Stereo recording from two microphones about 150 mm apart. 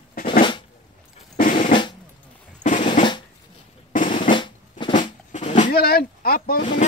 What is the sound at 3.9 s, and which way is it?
Drum, 60° left (ahead or behind).